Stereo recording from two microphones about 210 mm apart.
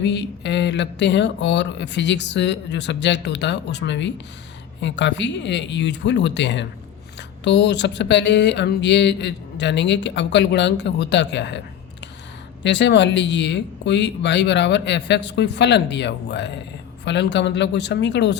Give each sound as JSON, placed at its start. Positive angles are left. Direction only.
{"t": 0.0, "sound": "speech", "side_deg": 55}